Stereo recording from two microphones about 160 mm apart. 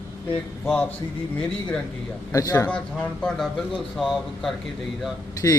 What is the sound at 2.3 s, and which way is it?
Speech, 20° left (ahead or behind).